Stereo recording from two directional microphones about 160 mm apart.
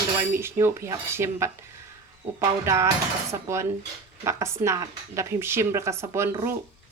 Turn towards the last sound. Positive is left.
turn(degrees=-15)  # may be behind; listen again after turning